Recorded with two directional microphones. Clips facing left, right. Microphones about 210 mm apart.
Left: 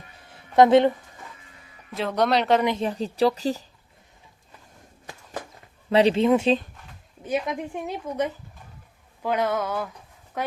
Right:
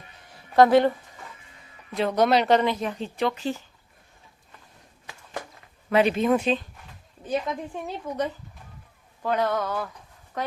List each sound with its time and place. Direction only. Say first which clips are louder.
0.3 s a sound: left 1 dB; 20° left (ahead or behind)
2.0 s speech: right 2 dB; centre (ahead or behind)
2.6 s speech: left 2 dB; 30° left (ahead or behind)
5.9 s speech: left 2 dB; 30° left (ahead or behind)
7.3 s a woman's voice: left 1 dB; 15° left (ahead or behind)